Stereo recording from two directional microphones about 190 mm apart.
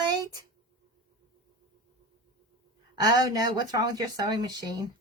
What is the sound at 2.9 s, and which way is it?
Speech, 20° right (ahead or behind).